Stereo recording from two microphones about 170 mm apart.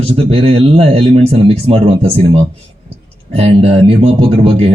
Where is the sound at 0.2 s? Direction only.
35° right (ahead or behind).